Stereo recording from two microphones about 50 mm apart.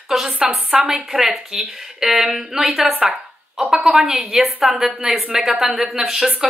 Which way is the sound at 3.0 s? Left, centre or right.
Centre.